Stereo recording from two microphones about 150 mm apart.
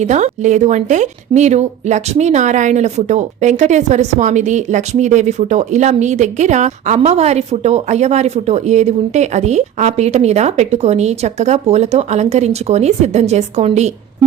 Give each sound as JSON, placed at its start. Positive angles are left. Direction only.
{"t": 0.0, "sound": "speech", "side_deg": -50}